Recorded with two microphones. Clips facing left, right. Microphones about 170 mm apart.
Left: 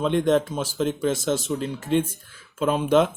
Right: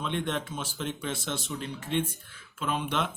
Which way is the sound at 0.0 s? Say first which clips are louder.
Left 11 dB; 40° left (ahead or behind).